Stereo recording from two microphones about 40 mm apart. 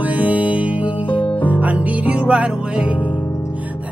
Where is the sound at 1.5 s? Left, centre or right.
Right.